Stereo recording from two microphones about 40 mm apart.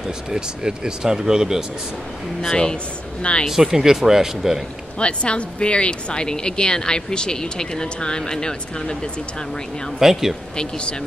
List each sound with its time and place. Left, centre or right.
0.3 s speech: centre
2.4 s speech: centre
3.4 s speech: centre
4.9 s speech: left
9.9 s speech: centre
10.5 s speech: left